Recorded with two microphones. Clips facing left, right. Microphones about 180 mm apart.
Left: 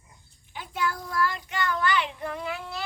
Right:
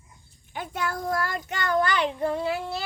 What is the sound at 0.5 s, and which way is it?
Child singing, 50° right (ahead or behind).